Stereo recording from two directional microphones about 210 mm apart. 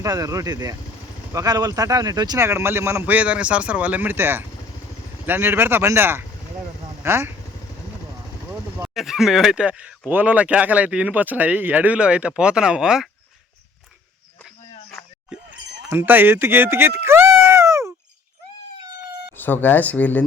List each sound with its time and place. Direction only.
0.0 s speech: 15° right (ahead or behind)
9.0 s speech: centre (ahead or behind)
14.4 s a sound: centre (ahead or behind)
19.4 s speech: 10° left (ahead or behind)